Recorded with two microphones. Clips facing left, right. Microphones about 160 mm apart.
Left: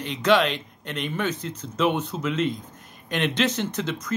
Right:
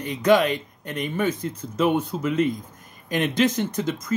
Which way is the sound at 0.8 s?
70° left (ahead or behind).